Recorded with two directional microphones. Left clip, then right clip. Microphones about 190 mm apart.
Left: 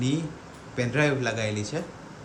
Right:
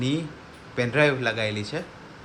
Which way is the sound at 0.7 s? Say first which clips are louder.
Right 4 dB; 10° left (ahead or behind).